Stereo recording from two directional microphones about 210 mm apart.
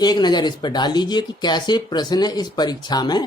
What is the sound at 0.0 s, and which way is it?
Speech, 20° left (ahead or behind).